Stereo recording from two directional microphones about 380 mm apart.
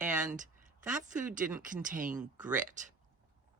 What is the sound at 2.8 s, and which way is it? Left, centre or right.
Speech, centre.